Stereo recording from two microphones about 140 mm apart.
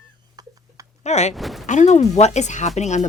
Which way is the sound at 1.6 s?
60° left (ahead or behind).